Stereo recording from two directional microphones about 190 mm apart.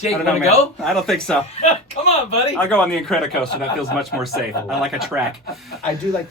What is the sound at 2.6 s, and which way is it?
Speech, 5° left (ahead or behind).